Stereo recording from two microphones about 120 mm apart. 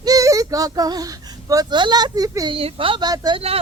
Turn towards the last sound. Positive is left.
turn(degrees=-35)  # may be behind; listen again after turning